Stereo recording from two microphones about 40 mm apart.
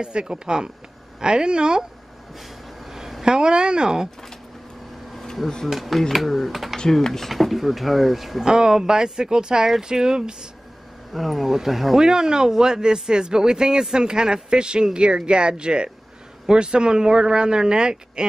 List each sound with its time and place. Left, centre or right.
0.0 s speech: right
2.3 s a sound: centre
3.3 s speech: right
5.7 s speech: centre
6.9 s speech: centre
8.5 s speech: centre
11.1 s speech: centre
12.0 s speech: centre